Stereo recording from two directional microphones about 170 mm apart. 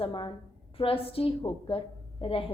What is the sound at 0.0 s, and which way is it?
A woman's voice, 30° left (ahead or behind).